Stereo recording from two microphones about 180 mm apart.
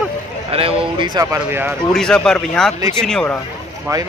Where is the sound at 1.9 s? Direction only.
5° left (ahead or behind).